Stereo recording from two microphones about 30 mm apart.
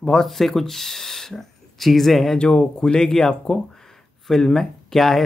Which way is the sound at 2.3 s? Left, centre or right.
Left.